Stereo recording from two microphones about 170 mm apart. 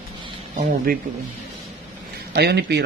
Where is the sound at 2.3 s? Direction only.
75° right (ahead or behind).